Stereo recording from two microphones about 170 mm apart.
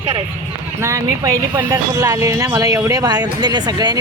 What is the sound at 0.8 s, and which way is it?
Speech, 15° right (ahead or behind).